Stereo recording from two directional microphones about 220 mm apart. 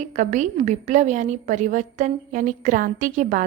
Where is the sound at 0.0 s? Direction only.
35° right (ahead or behind).